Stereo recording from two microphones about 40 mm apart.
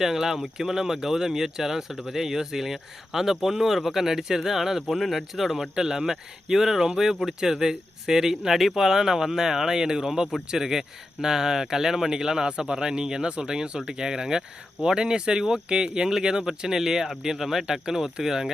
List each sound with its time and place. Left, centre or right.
0.0 s speech: centre